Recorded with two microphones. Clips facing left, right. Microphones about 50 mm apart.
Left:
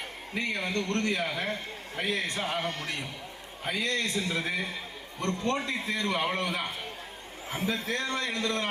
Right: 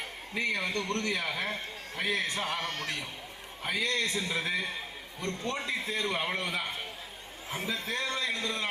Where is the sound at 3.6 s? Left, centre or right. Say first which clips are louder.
Even; left.